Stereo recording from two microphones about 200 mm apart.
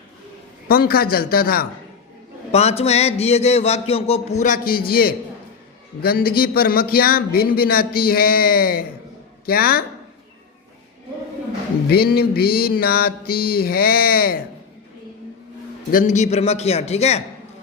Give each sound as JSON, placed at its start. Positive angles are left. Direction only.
{"t": 0.7, "sound": "speech", "side_deg": 45}
{"t": 2.5, "sound": "a man's voice", "side_deg": 30}
{"t": 11.9, "sound": "speech", "side_deg": 50}
{"t": 15.9, "sound": "a man's voice", "side_deg": 40}